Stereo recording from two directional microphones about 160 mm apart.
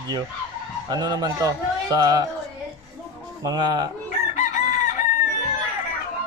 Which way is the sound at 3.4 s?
25° right (ahead or behind).